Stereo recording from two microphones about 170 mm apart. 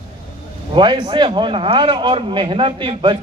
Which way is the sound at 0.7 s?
30° right (ahead or behind).